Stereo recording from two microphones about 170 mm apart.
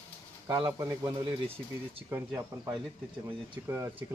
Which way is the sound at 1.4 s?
35° right (ahead or behind).